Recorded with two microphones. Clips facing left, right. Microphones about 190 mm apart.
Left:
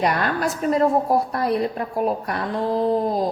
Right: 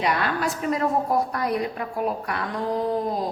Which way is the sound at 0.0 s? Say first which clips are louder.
Left 3 dB; 35° left (ahead or behind).